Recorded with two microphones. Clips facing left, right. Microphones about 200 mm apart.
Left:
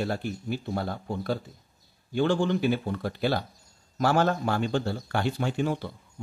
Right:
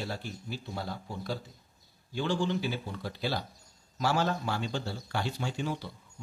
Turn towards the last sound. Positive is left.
turn(degrees=55)  # may be behind; listen again after turning